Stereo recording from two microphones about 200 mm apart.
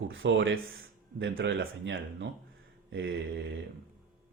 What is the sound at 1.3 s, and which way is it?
Speech, 55° right (ahead or behind).